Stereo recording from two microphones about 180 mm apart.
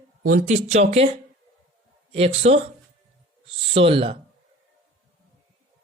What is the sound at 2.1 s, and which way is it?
Speech, 35° right (ahead or behind).